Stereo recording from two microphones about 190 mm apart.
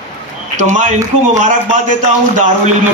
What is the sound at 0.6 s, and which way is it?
A man's voice, 40° right (ahead or behind).